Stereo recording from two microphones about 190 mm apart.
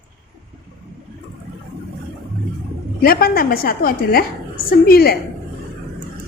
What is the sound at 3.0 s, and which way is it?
A woman's voice, 50° left (ahead or behind).